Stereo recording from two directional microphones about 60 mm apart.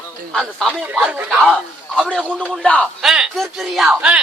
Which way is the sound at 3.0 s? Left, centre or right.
Centre.